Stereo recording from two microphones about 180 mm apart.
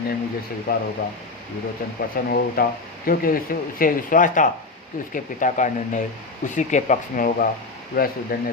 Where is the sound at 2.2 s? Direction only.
50° left (ahead or behind).